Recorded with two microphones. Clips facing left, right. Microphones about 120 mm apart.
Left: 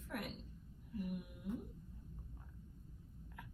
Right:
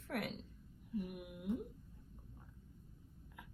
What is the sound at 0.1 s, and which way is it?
Speech, 85° right.